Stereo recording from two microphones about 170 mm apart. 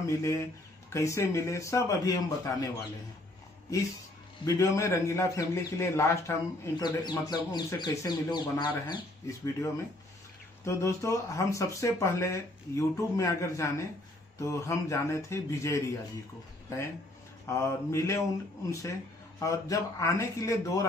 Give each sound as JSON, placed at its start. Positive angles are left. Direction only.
{"t": 0.0, "sound": "speech", "side_deg": 15}
{"t": 4.5, "sound": "a man's voice", "side_deg": 20}
{"t": 10.6, "sound": "speech", "side_deg": 15}
{"t": 17.5, "sound": "a man's voice", "side_deg": 15}